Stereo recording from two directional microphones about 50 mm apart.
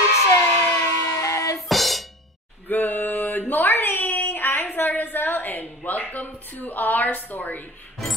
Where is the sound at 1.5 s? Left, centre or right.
Centre.